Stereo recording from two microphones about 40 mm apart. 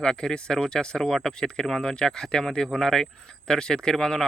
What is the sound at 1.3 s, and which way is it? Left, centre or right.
Speech, centre.